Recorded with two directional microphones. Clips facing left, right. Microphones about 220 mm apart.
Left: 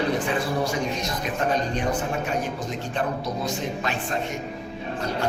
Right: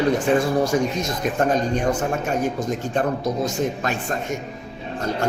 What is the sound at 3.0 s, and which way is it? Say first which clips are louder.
A man's voice: right 5 dB; 45° right (ahead or behind).